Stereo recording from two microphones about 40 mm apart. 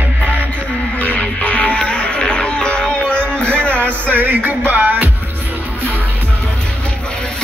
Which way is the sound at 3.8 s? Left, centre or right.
Right.